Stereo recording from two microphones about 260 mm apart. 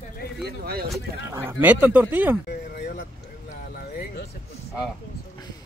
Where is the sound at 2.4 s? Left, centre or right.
Left.